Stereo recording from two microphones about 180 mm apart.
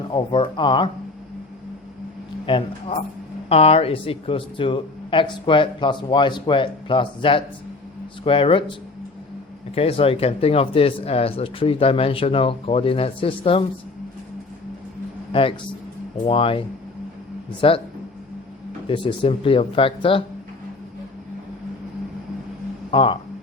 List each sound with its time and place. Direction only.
0.1 s speech: 30° left (ahead or behind)
2.5 s speech: 30° left (ahead or behind)
9.7 s speech: 30° left (ahead or behind)
15.3 s a man's voice: 30° left (ahead or behind)
18.9 s speech: 30° left (ahead or behind)
22.9 s speech: 30° left (ahead or behind)